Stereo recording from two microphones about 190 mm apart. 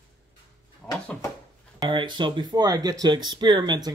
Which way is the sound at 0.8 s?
5° left (ahead or behind).